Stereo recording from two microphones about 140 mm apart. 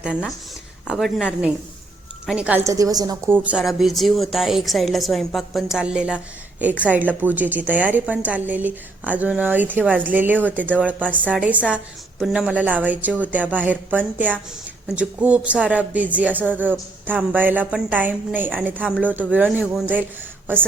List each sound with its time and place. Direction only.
0.9 s a woman's voice: centre (ahead or behind)
2.6 s a woman's voice: 25° right (ahead or behind)
3.3 s a woman's voice: 10° right (ahead or behind)